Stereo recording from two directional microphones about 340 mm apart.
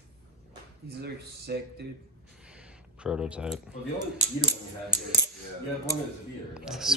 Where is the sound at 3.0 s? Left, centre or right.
Centre.